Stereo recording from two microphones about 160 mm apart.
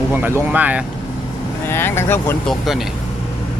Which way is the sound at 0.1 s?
15° right (ahead or behind).